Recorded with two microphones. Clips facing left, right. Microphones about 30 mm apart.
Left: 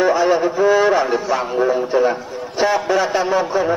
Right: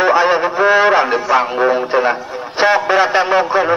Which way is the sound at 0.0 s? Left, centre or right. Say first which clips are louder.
Right 3 dB; right.